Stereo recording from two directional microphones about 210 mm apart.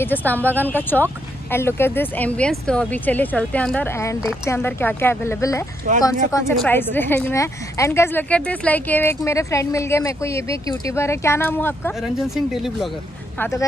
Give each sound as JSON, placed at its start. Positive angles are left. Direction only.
{"t": 0.0, "sound": "a woman's voice", "side_deg": 10}
{"t": 12.0, "sound": "speech", "side_deg": 0}
{"t": 13.4, "sound": "a woman's voice", "side_deg": 15}